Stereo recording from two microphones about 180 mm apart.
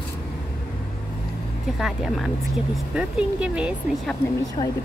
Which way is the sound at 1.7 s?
Centre (ahead or behind).